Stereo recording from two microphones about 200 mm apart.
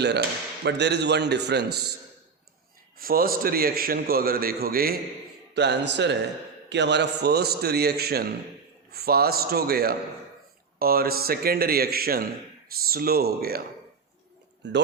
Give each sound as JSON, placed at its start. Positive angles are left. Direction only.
{"t": 0.0, "sound": "speech", "side_deg": -60}
{"t": 3.0, "sound": "a man's voice", "side_deg": -45}
{"t": 14.6, "sound": "speech", "side_deg": -60}